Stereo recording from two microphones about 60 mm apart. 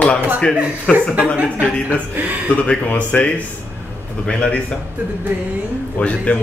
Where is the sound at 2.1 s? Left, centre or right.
Right.